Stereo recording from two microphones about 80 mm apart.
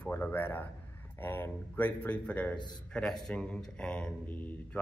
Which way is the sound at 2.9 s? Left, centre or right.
Centre.